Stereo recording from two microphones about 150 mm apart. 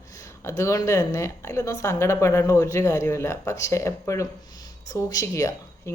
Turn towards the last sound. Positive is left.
turn(degrees=20)  # may be behind; listen again after turning